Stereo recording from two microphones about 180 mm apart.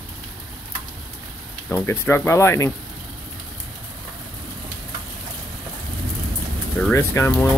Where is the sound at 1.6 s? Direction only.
10° left (ahead or behind).